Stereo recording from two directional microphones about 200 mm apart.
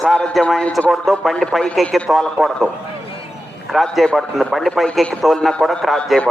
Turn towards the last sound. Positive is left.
turn(degrees=0)  # may be behind; listen again after turning